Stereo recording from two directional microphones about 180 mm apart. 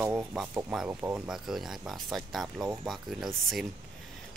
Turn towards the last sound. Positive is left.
turn(degrees=0)  # may be behind; listen again after turning